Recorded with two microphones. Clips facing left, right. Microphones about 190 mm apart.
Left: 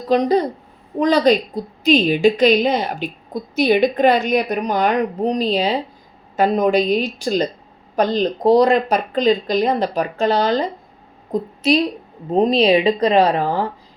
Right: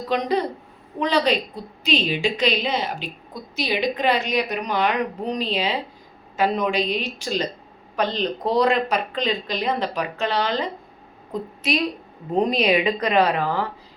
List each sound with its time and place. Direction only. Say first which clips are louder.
0.1 s a woman's voice: left 7 dB; 40° left (ahead or behind)